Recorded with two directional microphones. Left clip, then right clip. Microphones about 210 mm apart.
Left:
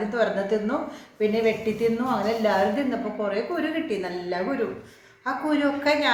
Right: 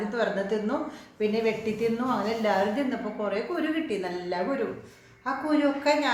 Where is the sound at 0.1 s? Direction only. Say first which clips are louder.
Left 4 dB; centre (ahead or behind).